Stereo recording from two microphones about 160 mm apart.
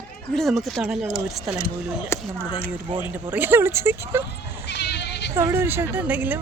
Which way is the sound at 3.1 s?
10° right (ahead or behind).